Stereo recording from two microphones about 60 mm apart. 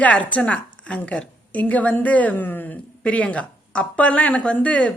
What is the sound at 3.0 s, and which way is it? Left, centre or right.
Speech, centre.